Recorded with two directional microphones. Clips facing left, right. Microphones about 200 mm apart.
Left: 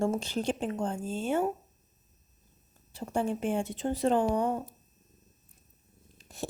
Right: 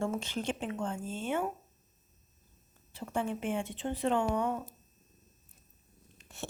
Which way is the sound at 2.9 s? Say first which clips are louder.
Left 4 dB; 35° left (ahead or behind).